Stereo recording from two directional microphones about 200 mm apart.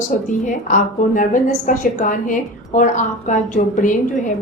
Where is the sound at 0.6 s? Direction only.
40° left (ahead or behind).